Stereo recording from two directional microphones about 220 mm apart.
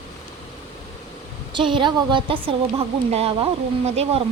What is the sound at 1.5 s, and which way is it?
A woman's voice, 20° right (ahead or behind).